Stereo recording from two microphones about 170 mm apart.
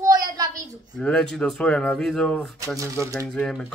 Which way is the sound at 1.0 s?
5° left (ahead or behind).